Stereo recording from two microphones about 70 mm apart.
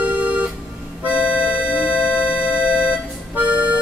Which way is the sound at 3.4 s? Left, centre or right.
Centre.